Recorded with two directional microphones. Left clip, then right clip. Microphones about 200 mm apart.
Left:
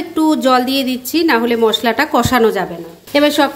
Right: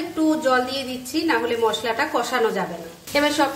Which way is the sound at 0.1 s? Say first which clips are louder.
Left 7 dB; 45° left (ahead or behind).